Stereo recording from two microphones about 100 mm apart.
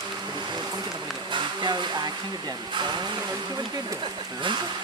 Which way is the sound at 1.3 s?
50° right (ahead or behind).